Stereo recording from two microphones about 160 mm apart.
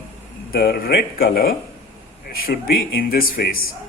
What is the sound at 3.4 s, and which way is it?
Speech, 80° left.